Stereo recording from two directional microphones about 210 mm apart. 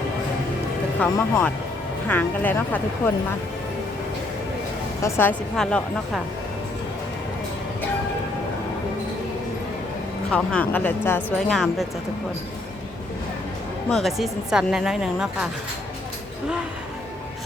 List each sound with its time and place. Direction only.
0.9 s speech: 5° left (ahead or behind)
5.0 s speech: 10° left (ahead or behind)
10.3 s speech: 5° left (ahead or behind)
13.9 s a woman's voice: centre (ahead or behind)